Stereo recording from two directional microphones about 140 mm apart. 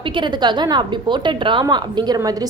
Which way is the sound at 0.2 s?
30° right (ahead or behind).